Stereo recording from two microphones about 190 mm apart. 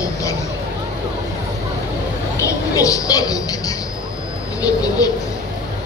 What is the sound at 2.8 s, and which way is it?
A woman's voice, 20° left (ahead or behind).